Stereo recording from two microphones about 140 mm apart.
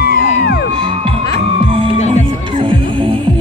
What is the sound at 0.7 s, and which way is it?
Crowd, 35° right (ahead or behind).